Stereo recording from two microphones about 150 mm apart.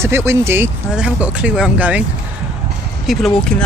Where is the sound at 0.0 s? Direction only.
15° right (ahead or behind).